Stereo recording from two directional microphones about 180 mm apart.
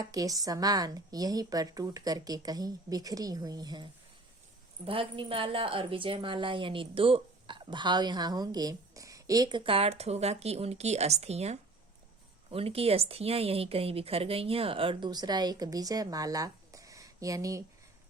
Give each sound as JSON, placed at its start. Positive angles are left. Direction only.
{"t": 0.0, "sound": "a woman's voice", "side_deg": -20}
{"t": 4.9, "sound": "a woman's voice", "side_deg": -30}